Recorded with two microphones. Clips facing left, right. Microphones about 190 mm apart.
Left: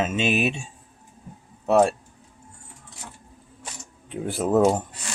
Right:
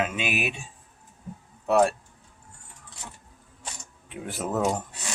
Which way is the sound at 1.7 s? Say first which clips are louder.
Left 3 dB; 25° left (ahead or behind).